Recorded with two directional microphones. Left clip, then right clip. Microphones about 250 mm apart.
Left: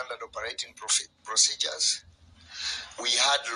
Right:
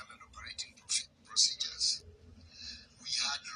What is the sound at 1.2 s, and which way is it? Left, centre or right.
Speech, left.